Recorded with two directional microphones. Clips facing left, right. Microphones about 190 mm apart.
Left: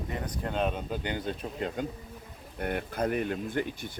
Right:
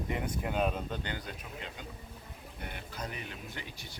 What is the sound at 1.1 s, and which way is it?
Speech, 20° left (ahead or behind).